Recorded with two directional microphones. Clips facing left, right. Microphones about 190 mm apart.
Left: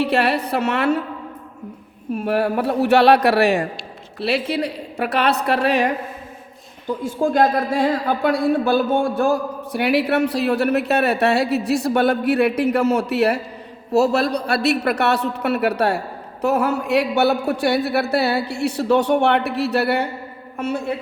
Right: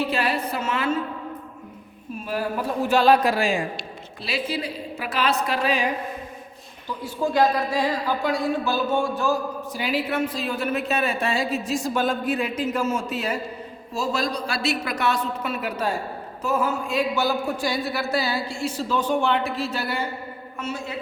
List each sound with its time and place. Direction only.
0.0 s a woman's voice: 70° left (ahead or behind)
2.1 s a man's voice: 65° left (ahead or behind)
6.8 s a man's voice: 50° left (ahead or behind)